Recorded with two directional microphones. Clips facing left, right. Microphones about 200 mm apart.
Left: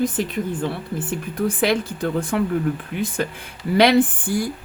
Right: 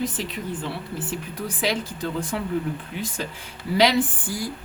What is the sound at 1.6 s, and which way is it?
Speech, 55° left (ahead or behind).